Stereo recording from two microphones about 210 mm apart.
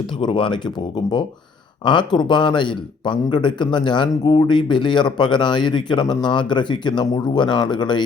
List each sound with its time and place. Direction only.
0.2 s a man's voice: 25° left (ahead or behind)